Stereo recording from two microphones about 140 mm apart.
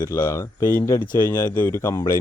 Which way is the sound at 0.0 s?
20° left (ahead or behind).